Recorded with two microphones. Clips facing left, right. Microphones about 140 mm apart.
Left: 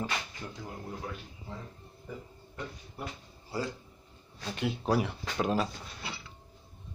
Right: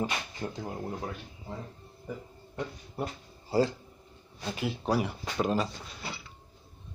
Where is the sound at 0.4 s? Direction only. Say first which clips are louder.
Right 7 dB; 30° right (ahead or behind).